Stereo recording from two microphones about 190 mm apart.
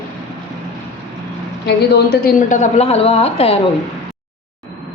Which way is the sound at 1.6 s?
60° left (ahead or behind).